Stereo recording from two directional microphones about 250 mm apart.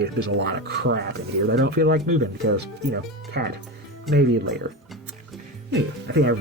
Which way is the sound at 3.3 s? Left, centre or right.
Right.